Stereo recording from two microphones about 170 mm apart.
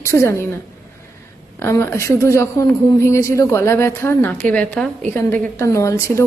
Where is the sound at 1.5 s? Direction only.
15° left (ahead or behind).